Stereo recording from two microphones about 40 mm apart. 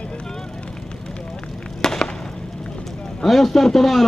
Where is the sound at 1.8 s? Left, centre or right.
Centre.